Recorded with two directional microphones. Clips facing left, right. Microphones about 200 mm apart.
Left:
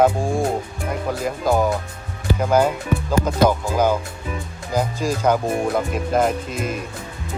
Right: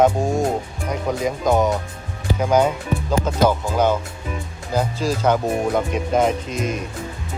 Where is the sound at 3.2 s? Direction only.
10° left (ahead or behind).